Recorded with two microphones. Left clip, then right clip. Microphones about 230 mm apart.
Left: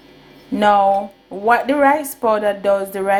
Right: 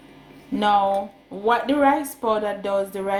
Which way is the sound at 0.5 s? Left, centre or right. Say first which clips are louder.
Left 6 dB; left.